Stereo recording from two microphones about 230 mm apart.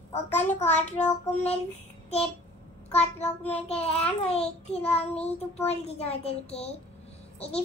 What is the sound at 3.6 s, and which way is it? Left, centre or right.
A child's voice, left.